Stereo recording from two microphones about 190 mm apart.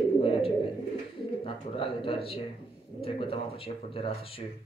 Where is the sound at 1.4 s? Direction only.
30° left (ahead or behind).